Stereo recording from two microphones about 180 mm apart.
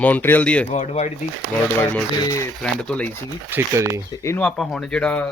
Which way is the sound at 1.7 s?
15° left (ahead or behind).